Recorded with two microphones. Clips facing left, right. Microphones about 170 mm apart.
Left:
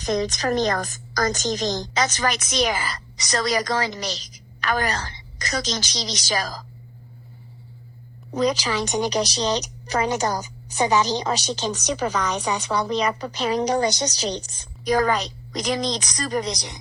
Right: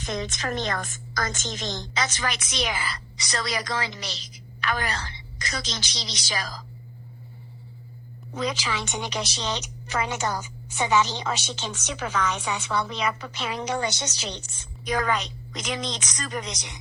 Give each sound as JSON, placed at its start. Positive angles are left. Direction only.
{"t": 0.0, "sound": "a woman's voice", "side_deg": 40}
{"t": 8.3, "sound": "a woman's voice", "side_deg": 40}